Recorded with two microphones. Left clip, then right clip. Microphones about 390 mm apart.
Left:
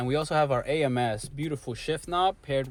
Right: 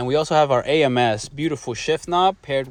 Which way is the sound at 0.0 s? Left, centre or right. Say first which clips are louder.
Right 8 dB; centre.